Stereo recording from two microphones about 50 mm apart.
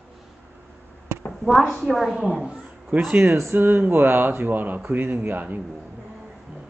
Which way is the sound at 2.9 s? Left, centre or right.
Right.